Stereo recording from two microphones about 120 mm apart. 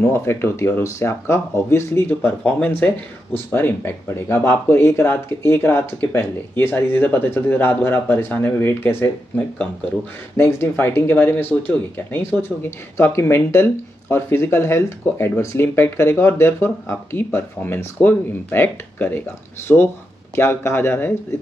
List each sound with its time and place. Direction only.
0.0 s speech: 20° left (ahead or behind)
10.3 s speech: 20° left (ahead or behind)
20.3 s speech: 20° left (ahead or behind)